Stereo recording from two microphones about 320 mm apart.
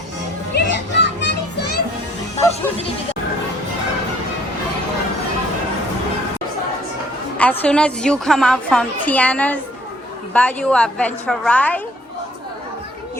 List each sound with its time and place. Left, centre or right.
0.5 s children playing: left
2.4 s music: centre
7.3 s a woman's voice: centre